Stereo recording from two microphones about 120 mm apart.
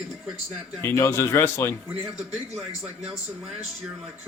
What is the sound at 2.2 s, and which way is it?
Speech, centre (ahead or behind).